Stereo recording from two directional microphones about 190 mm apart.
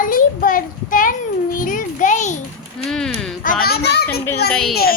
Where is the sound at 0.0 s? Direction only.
45° left (ahead or behind).